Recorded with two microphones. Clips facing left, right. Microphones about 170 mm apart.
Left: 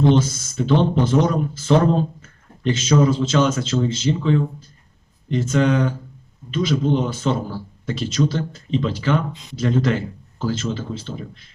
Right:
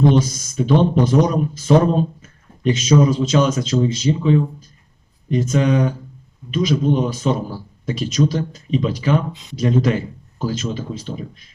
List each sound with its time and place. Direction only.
0.2 s speech: 15° right (ahead or behind)